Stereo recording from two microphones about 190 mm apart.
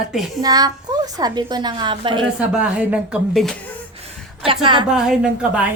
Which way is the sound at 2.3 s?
5° right (ahead or behind).